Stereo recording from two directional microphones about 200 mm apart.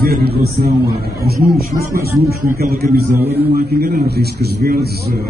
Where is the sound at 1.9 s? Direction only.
50° right (ahead or behind).